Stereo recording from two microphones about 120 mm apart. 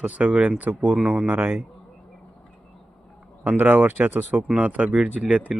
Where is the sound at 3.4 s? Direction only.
15° right (ahead or behind).